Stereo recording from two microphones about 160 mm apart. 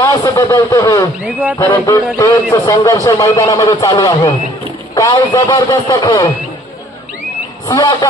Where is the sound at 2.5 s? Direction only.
20° left (ahead or behind).